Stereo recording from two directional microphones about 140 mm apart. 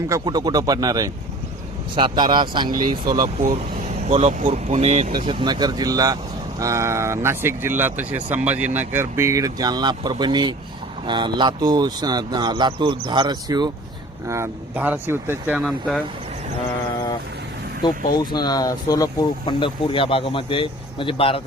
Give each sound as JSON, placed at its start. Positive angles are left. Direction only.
{"t": 0.1, "sound": "speech", "side_deg": -30}
{"t": 4.1, "sound": "speech", "side_deg": -55}
{"t": 5.1, "sound": "speech", "side_deg": -35}
{"t": 14.3, "sound": "speech", "side_deg": -20}
{"t": 17.8, "sound": "speech", "side_deg": 30}